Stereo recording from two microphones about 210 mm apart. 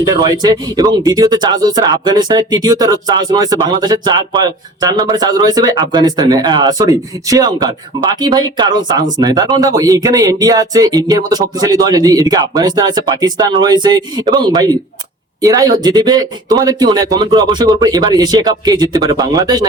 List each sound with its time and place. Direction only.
0.0 s speech: 20° right (ahead or behind)